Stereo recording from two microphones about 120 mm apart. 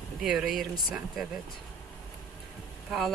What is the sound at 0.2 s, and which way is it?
Speech, 5° right (ahead or behind).